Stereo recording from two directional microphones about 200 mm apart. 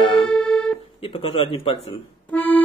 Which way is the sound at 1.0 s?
30° left (ahead or behind).